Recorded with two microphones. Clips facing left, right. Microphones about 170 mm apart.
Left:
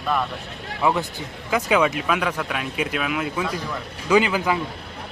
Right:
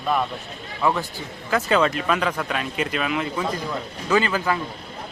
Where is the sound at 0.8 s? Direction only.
15° left (ahead or behind).